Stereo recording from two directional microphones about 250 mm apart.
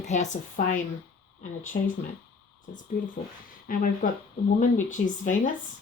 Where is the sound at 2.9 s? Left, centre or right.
Left.